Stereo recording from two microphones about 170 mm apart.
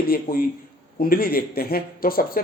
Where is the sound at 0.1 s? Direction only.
60° left (ahead or behind).